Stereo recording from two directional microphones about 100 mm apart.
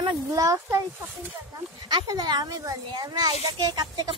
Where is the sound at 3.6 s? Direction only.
45° right (ahead or behind).